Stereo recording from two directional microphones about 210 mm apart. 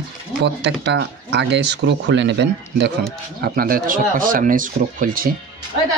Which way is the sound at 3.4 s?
45° right (ahead or behind).